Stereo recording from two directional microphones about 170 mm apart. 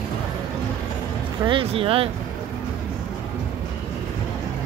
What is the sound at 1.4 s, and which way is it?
Speech, 30° right (ahead or behind).